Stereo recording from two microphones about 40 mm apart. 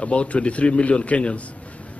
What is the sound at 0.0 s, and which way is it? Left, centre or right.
A man's voice, left.